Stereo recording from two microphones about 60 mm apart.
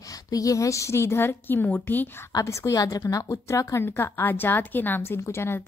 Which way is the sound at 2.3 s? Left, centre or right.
Left.